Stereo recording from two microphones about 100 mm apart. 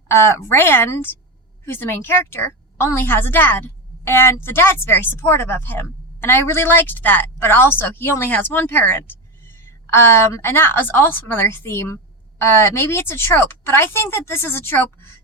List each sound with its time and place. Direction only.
0.1 s a woman's voice: 25° left (ahead or behind)